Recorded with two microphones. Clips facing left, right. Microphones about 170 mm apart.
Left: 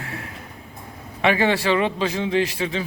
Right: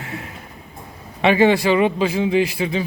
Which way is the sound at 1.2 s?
20° right (ahead or behind).